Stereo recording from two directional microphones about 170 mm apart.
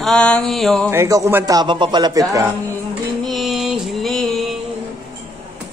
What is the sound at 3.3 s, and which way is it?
Music, centre (ahead or behind).